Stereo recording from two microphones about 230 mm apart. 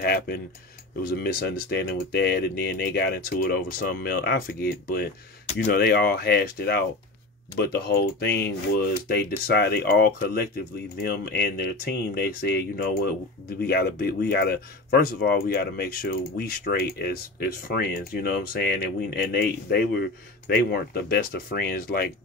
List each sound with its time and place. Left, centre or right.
0.0 s speech: left